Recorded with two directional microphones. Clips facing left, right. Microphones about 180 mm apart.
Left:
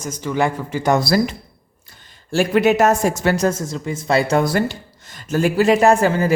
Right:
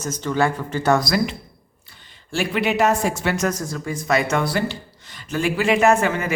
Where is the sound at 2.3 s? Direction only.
45° left (ahead or behind).